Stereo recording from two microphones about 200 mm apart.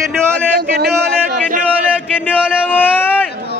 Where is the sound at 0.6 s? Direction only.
50° right (ahead or behind).